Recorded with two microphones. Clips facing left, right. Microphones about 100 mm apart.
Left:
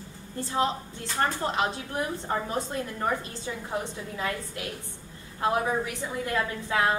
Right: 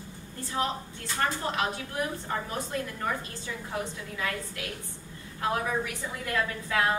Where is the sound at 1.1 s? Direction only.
30° left (ahead or behind).